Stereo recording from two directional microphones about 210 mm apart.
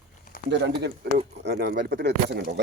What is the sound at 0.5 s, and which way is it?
Speech, 55° right (ahead or behind).